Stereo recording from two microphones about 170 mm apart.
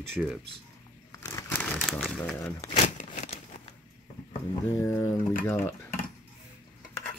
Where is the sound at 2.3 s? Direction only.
10° left (ahead or behind).